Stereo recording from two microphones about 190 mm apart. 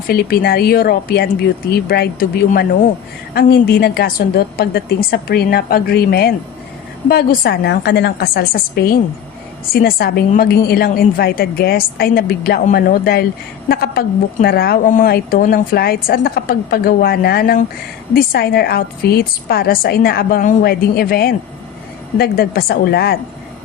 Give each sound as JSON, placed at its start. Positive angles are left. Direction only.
{"t": 0.1, "sound": "a woman's voice", "side_deg": 55}